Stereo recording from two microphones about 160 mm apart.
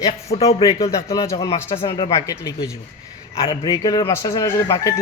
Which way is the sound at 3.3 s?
30° left (ahead or behind).